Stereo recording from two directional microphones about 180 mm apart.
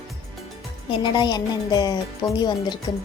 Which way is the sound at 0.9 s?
25° left (ahead or behind).